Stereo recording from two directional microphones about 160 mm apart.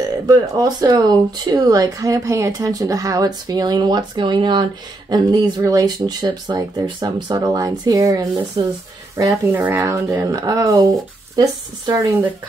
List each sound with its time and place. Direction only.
0.3 s speech: 25° right (ahead or behind)